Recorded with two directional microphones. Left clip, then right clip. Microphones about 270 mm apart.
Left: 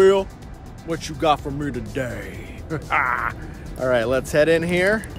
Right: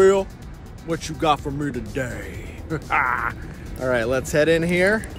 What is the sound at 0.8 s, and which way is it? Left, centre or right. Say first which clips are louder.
Speech: left 1 dB; centre.